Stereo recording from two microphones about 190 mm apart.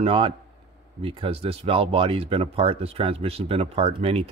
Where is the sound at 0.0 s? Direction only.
30° right (ahead or behind).